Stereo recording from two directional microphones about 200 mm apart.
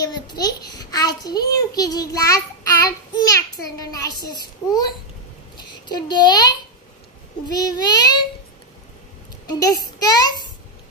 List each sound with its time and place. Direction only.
0.0 s a child's voice: 20° left (ahead or behind)
9.5 s a child's voice: 20° left (ahead or behind)